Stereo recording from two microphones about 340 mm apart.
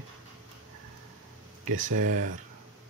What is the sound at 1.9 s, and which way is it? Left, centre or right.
Speech, right.